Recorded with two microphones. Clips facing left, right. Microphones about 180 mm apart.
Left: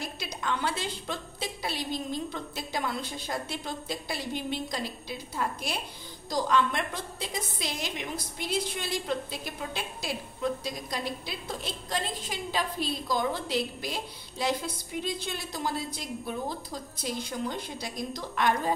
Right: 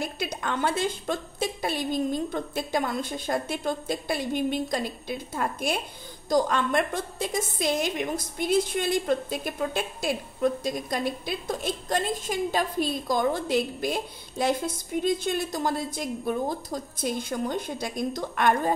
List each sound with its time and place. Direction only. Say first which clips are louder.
0.0 s a woman's voice: right 5 dB; 55° right (ahead or behind)